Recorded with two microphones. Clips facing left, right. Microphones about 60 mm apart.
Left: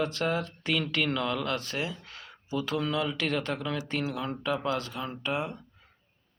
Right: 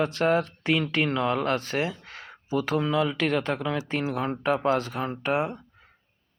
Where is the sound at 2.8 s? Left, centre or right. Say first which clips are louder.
Right 5 dB; right.